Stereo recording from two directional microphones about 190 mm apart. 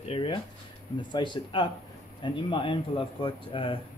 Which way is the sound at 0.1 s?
25° left (ahead or behind).